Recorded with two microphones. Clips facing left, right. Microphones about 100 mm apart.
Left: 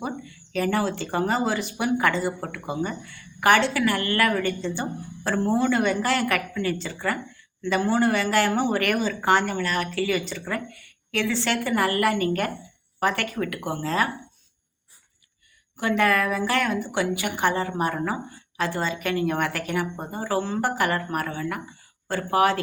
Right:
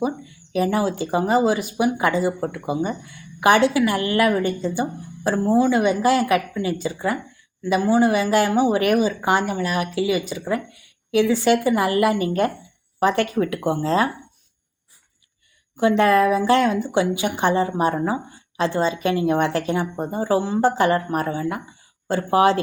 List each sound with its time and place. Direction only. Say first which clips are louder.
0.5 s a woman's voice: right 4 dB; 15° right (ahead or behind)
15.8 s a woman's voice: right 6 dB; 20° right (ahead or behind)